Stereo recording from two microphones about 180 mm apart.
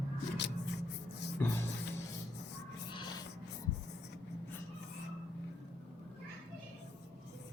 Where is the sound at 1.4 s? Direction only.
10° left (ahead or behind).